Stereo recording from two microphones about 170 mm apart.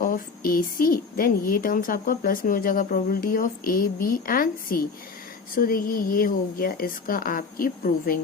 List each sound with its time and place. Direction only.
0.0 s a woman's voice: 55° left (ahead or behind)